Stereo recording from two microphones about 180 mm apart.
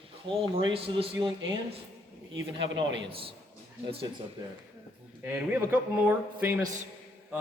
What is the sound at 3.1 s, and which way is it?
Speech, 30° right (ahead or behind).